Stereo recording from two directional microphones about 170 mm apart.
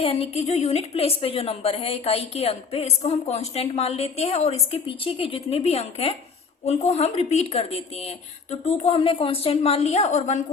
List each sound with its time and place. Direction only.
0.0 s a woman's voice: 35° left (ahead or behind)